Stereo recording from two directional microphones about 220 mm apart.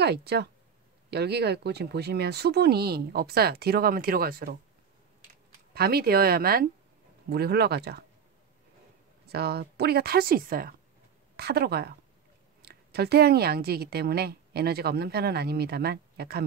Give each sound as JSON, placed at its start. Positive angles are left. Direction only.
{"t": 0.0, "sound": "a woman's voice", "side_deg": -45}
{"t": 5.8, "sound": "a woman's voice", "side_deg": -45}
{"t": 9.2, "sound": "a woman's voice", "side_deg": -45}